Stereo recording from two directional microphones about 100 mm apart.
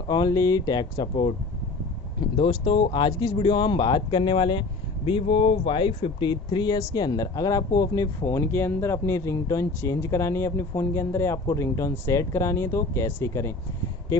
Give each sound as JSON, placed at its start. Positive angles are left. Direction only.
{"t": 0.1, "sound": "a man's voice", "side_deg": 40}
{"t": 2.3, "sound": "a man's voice", "side_deg": 60}